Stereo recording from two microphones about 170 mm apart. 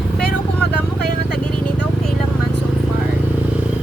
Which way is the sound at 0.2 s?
70° left (ahead or behind).